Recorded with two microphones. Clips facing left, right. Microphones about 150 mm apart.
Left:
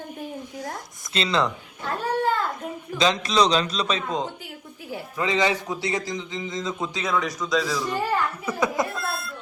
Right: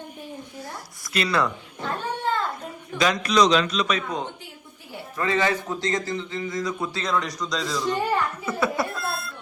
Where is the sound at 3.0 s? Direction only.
25° left (ahead or behind).